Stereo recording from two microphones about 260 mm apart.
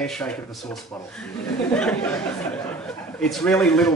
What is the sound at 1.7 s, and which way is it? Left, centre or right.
Speech, centre.